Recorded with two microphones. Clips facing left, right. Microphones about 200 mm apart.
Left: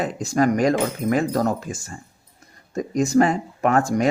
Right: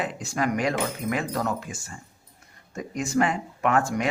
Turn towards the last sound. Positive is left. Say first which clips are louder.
# left 4 dB
turn(degrees=40)  # may be behind; listen again after turning